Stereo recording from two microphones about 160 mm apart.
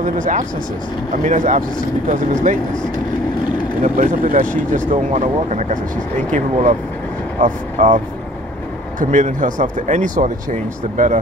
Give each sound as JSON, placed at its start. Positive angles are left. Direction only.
{"t": 0.0, "sound": "speech", "side_deg": -55}
{"t": 3.8, "sound": "speech", "side_deg": -55}
{"t": 9.0, "sound": "speech", "side_deg": -55}